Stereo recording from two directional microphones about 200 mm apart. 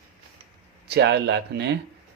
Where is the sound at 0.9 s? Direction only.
55° right (ahead or behind).